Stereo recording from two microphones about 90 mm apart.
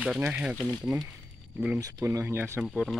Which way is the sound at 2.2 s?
25° right (ahead or behind).